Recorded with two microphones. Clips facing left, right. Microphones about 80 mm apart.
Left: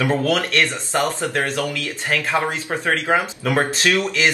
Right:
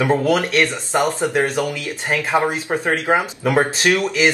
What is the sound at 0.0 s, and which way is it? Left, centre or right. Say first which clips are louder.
Speech: right 3 dB; right.